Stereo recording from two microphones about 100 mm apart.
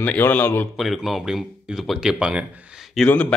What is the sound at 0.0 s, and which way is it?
Speech, 15° left (ahead or behind).